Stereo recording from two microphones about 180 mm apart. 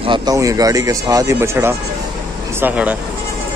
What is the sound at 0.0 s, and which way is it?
Speech, 25° right (ahead or behind).